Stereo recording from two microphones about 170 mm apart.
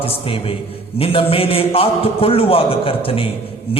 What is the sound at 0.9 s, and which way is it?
A man's voice, 35° left (ahead or behind).